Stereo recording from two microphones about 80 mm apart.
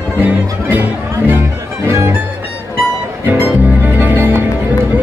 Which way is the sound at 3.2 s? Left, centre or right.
Right.